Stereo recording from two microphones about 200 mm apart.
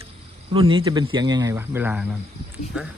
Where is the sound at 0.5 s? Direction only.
25° right (ahead or behind).